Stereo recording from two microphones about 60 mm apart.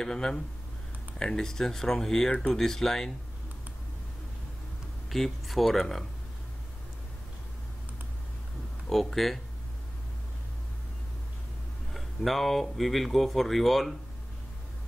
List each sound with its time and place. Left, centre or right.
0.0 s speech: centre
5.1 s speech: centre
8.8 s speech: centre
11.9 s speech: centre